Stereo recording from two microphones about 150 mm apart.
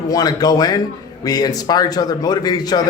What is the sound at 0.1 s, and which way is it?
A man's voice, 25° left (ahead or behind).